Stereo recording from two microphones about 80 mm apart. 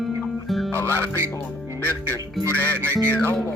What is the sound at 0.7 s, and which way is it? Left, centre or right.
Music, left.